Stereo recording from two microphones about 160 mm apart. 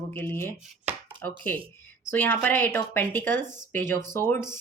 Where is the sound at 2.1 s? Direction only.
15° left (ahead or behind).